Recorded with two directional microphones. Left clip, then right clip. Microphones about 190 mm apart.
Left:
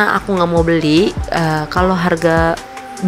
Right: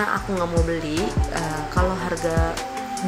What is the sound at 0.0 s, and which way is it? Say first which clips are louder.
Speech: left 9 dB; 55° left (ahead or behind).